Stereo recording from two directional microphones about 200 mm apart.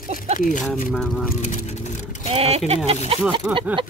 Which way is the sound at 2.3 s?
30° right (ahead or behind).